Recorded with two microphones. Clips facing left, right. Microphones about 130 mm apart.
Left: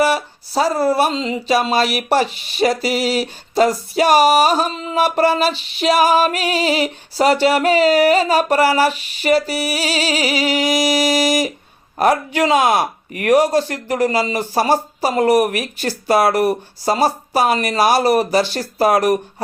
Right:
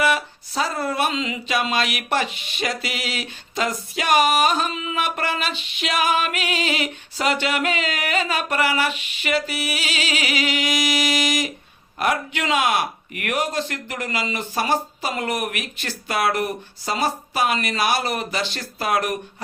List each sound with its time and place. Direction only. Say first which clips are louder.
0.0 s speech: left 4 dB; 35° left (ahead or behind)